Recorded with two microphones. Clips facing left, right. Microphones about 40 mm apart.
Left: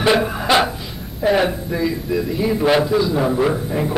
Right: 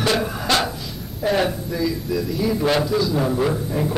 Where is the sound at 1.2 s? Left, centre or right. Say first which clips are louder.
Left 3 dB; centre.